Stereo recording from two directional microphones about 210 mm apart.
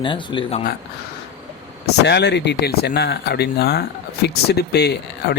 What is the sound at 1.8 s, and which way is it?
Speech, 50° left (ahead or behind).